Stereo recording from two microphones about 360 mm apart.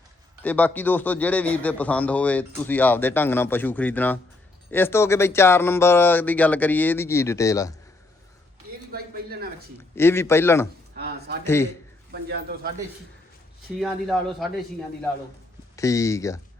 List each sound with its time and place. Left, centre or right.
0.4 s a man's voice: centre
8.9 s speech: right
9.7 s speech: centre
10.9 s a sound: right
11.4 s speech: centre
12.1 s speech: right
13.7 s a man's voice: centre
15.7 s speech: centre